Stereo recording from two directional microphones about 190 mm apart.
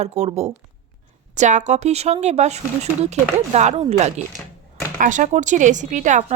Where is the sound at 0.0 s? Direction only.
35° right (ahead or behind).